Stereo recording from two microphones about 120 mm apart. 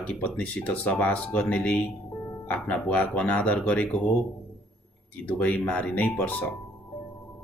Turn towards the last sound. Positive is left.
turn(degrees=15)  # may be behind; listen again after turning